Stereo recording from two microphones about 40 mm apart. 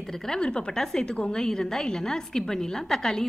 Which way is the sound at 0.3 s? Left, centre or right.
Left.